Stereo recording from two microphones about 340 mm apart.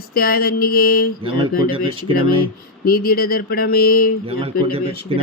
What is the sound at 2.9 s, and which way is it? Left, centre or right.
Mantra, left.